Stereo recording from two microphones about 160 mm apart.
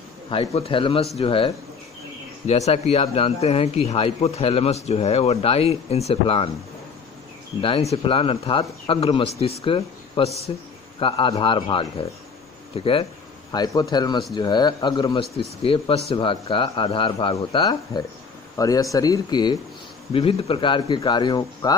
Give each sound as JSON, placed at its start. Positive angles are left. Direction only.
{"t": 0.3, "sound": "a man's voice", "side_deg": 35}
{"t": 7.6, "sound": "a man's voice", "side_deg": 35}
{"t": 20.1, "sound": "speech", "side_deg": 35}